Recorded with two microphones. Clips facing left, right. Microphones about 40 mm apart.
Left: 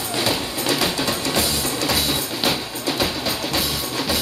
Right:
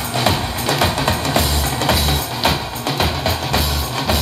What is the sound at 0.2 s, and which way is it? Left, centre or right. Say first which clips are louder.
Music: right 4 dB; right.